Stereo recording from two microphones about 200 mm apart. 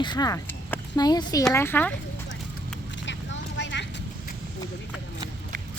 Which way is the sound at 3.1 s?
65° left (ahead or behind).